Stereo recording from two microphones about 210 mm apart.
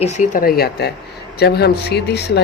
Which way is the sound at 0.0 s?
35° left (ahead or behind).